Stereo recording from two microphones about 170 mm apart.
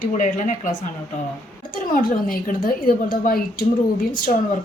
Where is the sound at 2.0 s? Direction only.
55° left (ahead or behind).